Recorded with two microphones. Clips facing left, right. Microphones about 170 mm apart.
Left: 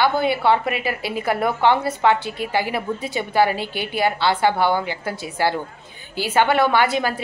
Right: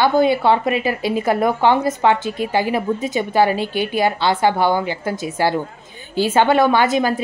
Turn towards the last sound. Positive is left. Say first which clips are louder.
# right 3 dB
turn(degrees=-20)  # may be behind; listen again after turning